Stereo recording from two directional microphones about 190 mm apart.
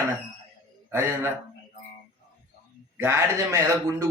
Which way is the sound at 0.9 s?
15° right (ahead or behind).